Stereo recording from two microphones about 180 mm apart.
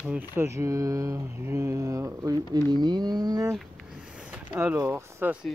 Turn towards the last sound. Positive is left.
turn(degrees=-15)  # may be behind; listen again after turning